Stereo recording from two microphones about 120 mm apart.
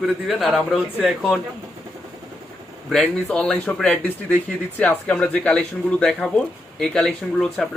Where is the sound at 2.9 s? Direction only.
5° left (ahead or behind).